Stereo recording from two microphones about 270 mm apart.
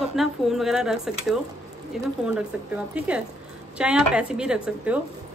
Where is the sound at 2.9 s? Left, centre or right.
Centre.